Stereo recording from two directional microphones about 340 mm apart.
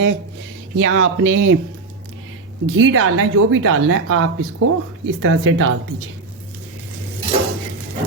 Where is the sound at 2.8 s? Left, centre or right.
Right.